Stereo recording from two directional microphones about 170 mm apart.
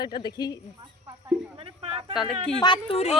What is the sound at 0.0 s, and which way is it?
Speech, 25° left (ahead or behind).